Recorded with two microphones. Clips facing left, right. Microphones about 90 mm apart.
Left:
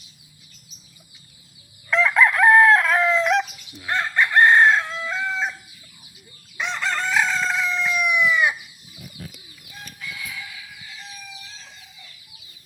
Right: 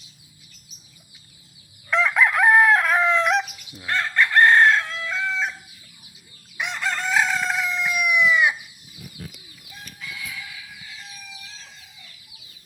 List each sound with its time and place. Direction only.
1.9 s chicken: centre (ahead or behind)
3.8 s chicken: 10° left (ahead or behind)
6.6 s chicken: 15° right (ahead or behind)